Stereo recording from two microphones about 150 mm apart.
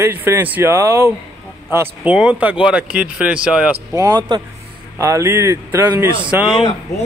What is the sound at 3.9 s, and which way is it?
A man's voice, 25° right (ahead or behind).